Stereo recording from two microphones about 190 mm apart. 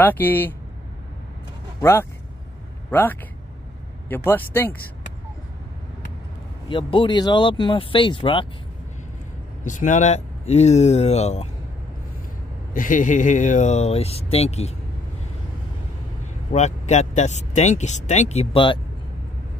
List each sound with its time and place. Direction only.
0.0 s speech: 10° left (ahead or behind)
1.8 s speech: 15° left (ahead or behind)
6.7 s speech: 25° left (ahead or behind)
9.7 s speech: 40° left (ahead or behind)
12.7 s speech: 45° left (ahead or behind)
16.5 s speech: 35° left (ahead or behind)